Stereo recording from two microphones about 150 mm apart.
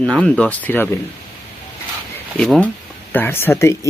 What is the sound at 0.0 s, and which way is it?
Speech, 5° left (ahead or behind).